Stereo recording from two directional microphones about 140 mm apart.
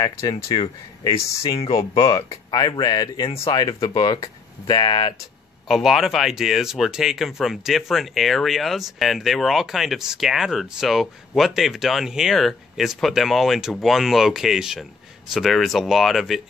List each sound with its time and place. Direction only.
0.0 s speech: 30° left (ahead or behind)
5.7 s speech: centre (ahead or behind)